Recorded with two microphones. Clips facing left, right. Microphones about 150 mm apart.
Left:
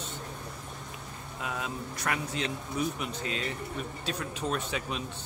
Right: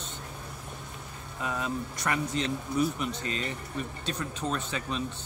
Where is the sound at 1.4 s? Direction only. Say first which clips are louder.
Right 4 dB; 5° left (ahead or behind).